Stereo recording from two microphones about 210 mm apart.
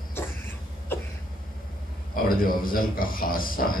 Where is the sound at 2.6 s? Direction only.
40° left (ahead or behind).